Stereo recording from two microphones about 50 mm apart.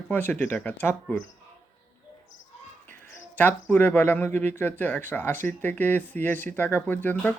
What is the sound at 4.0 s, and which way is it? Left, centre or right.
Speech, left.